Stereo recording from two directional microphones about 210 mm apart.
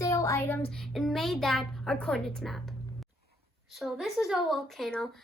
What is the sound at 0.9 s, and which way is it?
Speech, centre (ahead or behind).